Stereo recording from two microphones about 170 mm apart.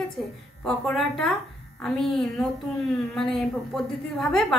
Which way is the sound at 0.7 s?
Centre (ahead or behind).